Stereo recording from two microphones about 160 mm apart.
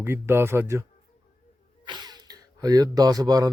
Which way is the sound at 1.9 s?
25° right (ahead or behind).